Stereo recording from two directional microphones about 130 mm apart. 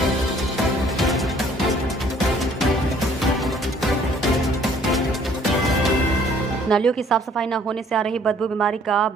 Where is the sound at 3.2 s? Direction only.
Centre (ahead or behind).